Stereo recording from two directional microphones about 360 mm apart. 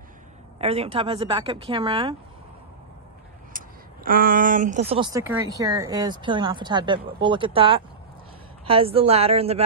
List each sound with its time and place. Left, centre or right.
0.6 s speech: centre
3.5 s speech: right